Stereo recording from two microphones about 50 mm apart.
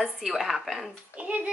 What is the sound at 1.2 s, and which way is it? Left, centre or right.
Speech, right.